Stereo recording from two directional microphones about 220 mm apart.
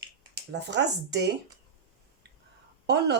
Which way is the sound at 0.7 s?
50° right (ahead or behind).